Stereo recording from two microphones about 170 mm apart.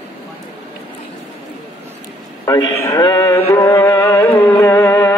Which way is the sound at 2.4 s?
20° left (ahead or behind).